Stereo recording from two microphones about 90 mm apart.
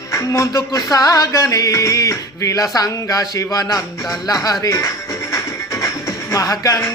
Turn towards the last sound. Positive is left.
turn(degrees=40)  # may be behind; listen again after turning